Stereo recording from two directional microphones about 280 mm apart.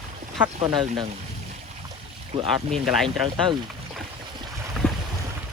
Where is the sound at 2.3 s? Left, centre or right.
Centre.